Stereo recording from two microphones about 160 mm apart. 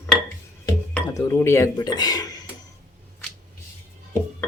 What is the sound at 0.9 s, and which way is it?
Speech, 15° left (ahead or behind).